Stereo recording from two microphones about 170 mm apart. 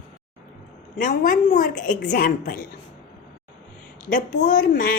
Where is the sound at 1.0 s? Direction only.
50° left (ahead or behind).